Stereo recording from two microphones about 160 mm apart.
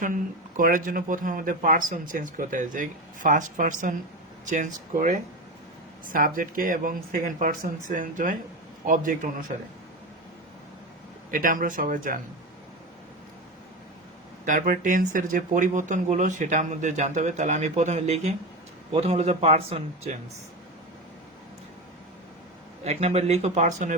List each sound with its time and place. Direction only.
0.0 s speech: 55° right (ahead or behind)
11.3 s speech: 55° right (ahead or behind)
14.4 s a man's voice: 55° right (ahead or behind)
22.8 s speech: 40° right (ahead or behind)